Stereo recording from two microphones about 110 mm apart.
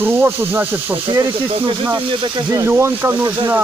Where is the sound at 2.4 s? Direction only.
25° right (ahead or behind).